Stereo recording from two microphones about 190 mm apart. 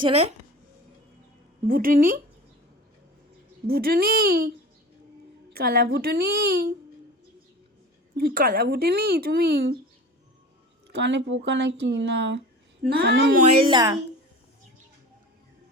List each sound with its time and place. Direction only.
0.0 s a woman's voice: 35° right (ahead or behind)
1.6 s speech: 45° right (ahead or behind)
3.7 s speech: 55° right (ahead or behind)
5.5 s speech: 55° right (ahead or behind)
8.1 s speech: 55° right (ahead or behind)
10.8 s speech: 70° right (ahead or behind)
12.8 s speech: 55° right (ahead or behind)
13.4 s speech: 30° right (ahead or behind)